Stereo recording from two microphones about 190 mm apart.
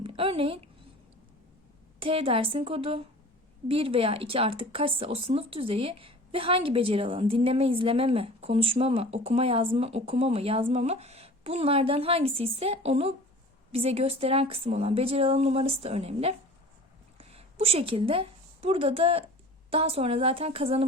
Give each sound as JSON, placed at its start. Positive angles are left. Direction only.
{"t": 0.0, "sound": "a woman's voice", "side_deg": -30}
{"t": 2.0, "sound": "a woman's voice", "side_deg": -30}